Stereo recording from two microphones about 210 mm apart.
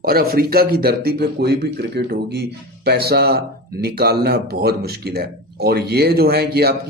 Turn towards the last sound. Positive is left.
turn(degrees=-50)  # may be behind; listen again after turning